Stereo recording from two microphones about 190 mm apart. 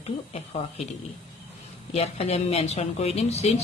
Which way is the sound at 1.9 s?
35° left (ahead or behind).